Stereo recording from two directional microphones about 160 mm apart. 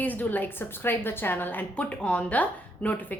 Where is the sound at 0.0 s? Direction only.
10° left (ahead or behind).